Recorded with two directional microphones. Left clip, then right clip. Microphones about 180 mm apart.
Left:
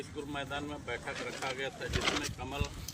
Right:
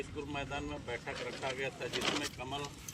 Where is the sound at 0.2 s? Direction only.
15° right (ahead or behind).